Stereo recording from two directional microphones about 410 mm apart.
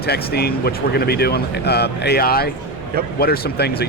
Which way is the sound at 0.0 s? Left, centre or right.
Left.